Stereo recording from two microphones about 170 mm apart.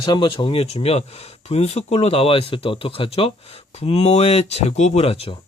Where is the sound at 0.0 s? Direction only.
30° left (ahead or behind).